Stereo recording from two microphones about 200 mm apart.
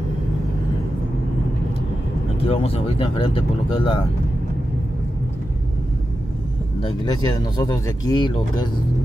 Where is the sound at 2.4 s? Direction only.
30° left (ahead or behind).